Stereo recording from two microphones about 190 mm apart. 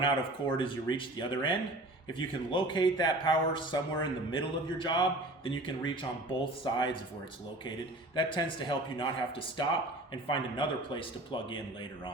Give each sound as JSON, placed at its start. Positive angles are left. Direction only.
{"t": 0.0, "sound": "a man's voice", "side_deg": 25}
{"t": 8.1, "sound": "a man's voice", "side_deg": 25}
{"t": 10.2, "sound": "a man's voice", "side_deg": 25}